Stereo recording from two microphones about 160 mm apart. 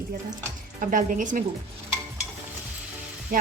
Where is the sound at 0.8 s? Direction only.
55° right (ahead or behind).